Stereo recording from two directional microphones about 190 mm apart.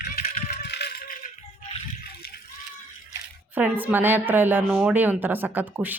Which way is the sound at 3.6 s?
10° right (ahead or behind).